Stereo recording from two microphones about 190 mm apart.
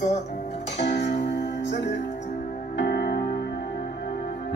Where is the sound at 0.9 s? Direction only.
65° left (ahead or behind).